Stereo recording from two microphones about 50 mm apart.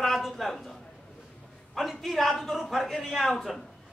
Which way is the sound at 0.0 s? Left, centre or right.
Centre.